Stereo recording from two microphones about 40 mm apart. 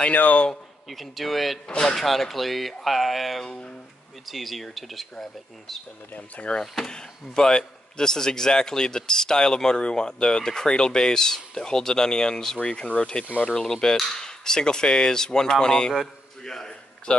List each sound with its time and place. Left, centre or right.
0.1 s a man's voice: left
0.8 s speech: centre
1.7 s speech: centre
2.0 s speech: centre
6.1 s speech: left
6.6 s speech: centre
6.9 s a man's voice: centre
13.6 s a man's voice: centre
16.4 s a sound: centre